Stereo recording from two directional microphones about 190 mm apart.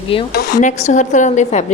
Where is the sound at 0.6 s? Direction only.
40° left (ahead or behind).